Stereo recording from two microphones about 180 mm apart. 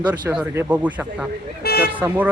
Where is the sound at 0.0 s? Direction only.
10° right (ahead or behind).